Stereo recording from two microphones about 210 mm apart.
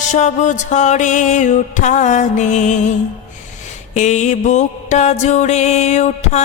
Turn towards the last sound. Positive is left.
turn(degrees=35)  # may be behind; listen again after turning